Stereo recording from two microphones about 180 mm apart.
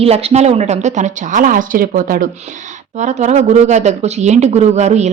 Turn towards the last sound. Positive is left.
turn(degrees=-40)  # may be behind; listen again after turning